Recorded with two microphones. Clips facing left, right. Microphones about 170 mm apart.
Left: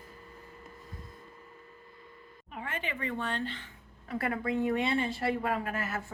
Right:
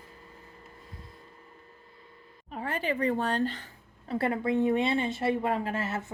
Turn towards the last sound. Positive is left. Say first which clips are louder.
# right 3 dB
turn(degrees=-25)  # may be behind; listen again after turning